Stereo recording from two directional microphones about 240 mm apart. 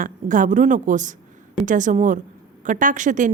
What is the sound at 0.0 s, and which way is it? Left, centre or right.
A woman's voice, right.